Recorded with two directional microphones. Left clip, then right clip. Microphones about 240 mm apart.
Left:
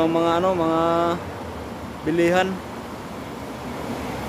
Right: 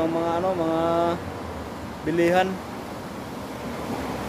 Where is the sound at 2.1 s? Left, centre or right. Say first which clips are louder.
Left 1 dB; centre.